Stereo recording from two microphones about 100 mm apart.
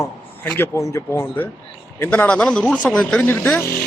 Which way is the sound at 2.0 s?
10° left (ahead or behind).